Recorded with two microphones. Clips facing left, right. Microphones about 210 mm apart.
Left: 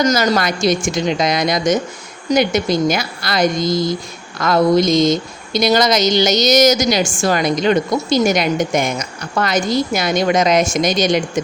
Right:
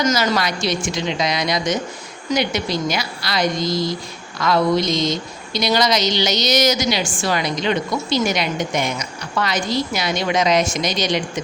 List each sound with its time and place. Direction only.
0.0 s speech: 40° left (ahead or behind)